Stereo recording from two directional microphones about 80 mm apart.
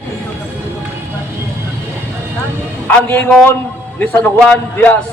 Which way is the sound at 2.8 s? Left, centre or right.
Left.